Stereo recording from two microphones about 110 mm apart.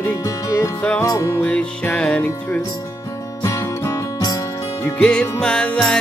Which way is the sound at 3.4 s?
30° left (ahead or behind).